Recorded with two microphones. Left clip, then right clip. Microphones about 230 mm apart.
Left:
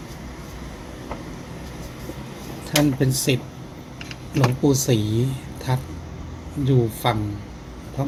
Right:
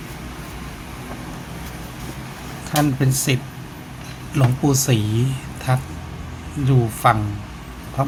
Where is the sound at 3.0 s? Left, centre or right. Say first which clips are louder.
Even; centre.